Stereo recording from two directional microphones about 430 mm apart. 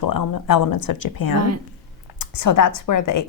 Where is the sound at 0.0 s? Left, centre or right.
Left.